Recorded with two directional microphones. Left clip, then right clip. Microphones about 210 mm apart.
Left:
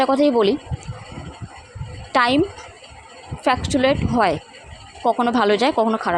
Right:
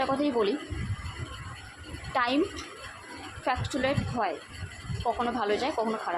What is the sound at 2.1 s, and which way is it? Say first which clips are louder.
Speech: left 10 dB; 45° left (ahead or behind).